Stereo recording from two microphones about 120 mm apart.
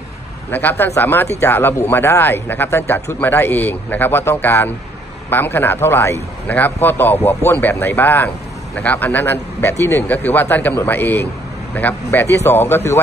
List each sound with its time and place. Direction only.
0.5 s speech: 15° left (ahead or behind)